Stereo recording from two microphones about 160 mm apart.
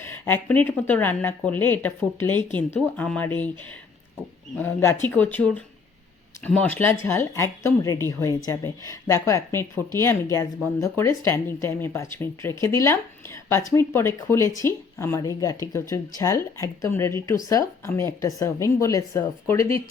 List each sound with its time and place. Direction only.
0.0 s a woman's voice: 15° left (ahead or behind)
4.5 s a woman's voice: 15° left (ahead or behind)